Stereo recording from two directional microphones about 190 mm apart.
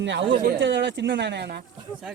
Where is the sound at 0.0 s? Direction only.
70° right (ahead or behind).